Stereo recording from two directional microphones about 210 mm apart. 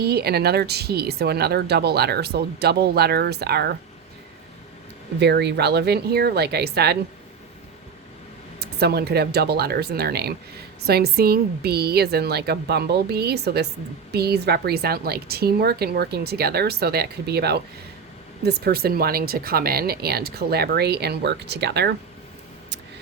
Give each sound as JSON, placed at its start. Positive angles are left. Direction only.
{"t": 0.0, "sound": "speech", "side_deg": -50}
{"t": 5.2, "sound": "speech", "side_deg": -55}
{"t": 8.5, "sound": "speech", "side_deg": -50}